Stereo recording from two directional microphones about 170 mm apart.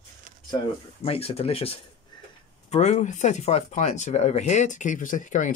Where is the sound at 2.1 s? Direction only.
25° left (ahead or behind).